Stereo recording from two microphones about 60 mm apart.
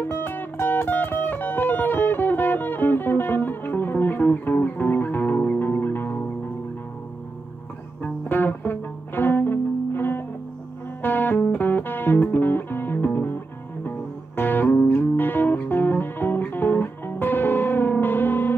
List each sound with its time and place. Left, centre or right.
0.0 s music: left
8.0 s music: left